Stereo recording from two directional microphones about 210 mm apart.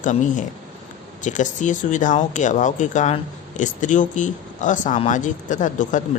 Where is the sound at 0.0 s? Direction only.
35° left (ahead or behind).